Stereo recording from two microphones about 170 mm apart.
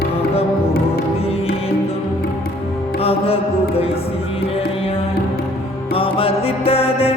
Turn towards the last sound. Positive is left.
turn(degrees=35)  # may be behind; listen again after turning